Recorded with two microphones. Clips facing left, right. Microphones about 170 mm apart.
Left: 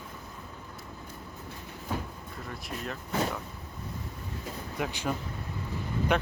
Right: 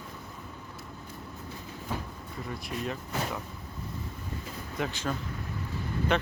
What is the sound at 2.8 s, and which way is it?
Speech, centre (ahead or behind).